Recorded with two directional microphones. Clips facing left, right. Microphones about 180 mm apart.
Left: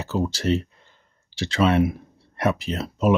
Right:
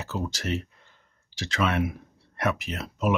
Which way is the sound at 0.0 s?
30° left (ahead or behind).